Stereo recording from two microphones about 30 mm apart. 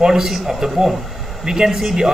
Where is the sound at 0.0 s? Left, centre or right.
Centre.